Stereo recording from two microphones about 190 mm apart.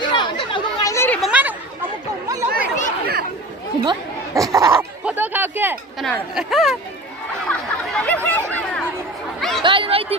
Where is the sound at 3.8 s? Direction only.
20° right (ahead or behind).